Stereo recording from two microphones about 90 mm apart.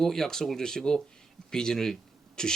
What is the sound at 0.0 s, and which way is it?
Speech, 5° left (ahead or behind).